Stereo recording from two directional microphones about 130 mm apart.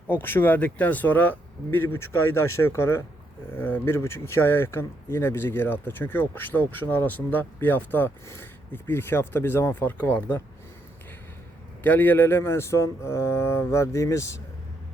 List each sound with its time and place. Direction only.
0.1 s speech: 15° left (ahead or behind)
11.8 s speech: 15° left (ahead or behind)